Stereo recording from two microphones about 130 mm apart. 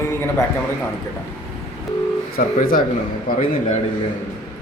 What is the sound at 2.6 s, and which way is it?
Speech, 90° left.